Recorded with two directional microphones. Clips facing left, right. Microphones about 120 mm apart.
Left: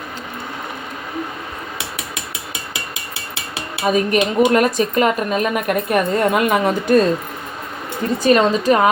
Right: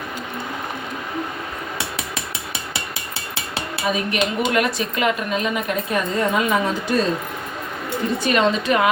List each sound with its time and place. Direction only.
3.8 s speech: 45° left (ahead or behind)
8.2 s a woman's voice: 40° left (ahead or behind)